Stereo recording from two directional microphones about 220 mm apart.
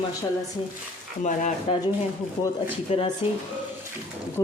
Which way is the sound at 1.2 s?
35° left (ahead or behind).